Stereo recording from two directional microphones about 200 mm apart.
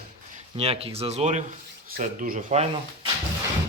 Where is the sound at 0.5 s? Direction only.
30° right (ahead or behind).